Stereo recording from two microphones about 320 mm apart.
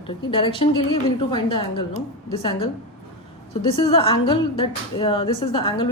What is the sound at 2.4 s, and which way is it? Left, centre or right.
Speech, centre.